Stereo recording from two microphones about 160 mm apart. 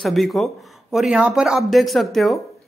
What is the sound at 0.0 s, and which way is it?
A woman's voice, centre (ahead or behind).